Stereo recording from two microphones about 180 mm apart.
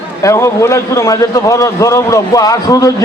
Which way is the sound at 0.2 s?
15° left (ahead or behind).